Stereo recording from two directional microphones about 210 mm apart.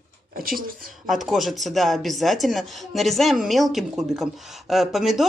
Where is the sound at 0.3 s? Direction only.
45° right (ahead or behind).